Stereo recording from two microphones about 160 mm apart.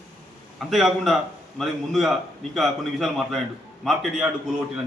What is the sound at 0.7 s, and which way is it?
A man's voice, centre (ahead or behind).